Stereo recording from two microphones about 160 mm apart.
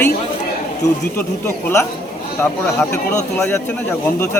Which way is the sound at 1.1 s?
15° left (ahead or behind).